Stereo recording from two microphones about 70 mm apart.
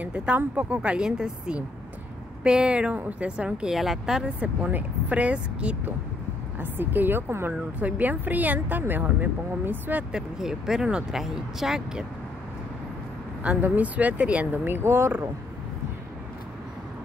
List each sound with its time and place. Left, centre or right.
0.0 s speech: centre
0.7 s speech: centre
4.4 s speech: right
6.6 s a woman's voice: right
10.1 s speech: centre
13.6 s speech: right